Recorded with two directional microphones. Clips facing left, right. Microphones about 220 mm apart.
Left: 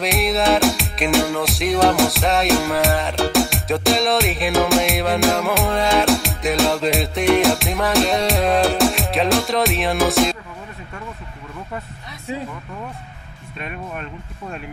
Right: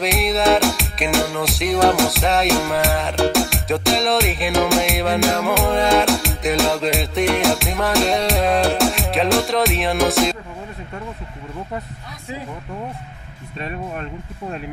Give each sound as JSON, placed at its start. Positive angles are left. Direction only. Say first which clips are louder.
{"t": 0.0, "sound": "music", "louder": "right 1 dB", "side_deg": 0}
{"t": 13.6, "sound": "speech", "louder": "right 2 dB", "side_deg": -35}